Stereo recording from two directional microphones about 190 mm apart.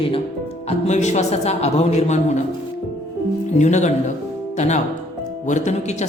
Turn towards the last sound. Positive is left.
turn(degrees=40)  # may be behind; listen again after turning